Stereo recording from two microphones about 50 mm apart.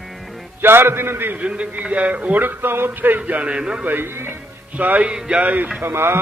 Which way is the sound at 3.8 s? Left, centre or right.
Right.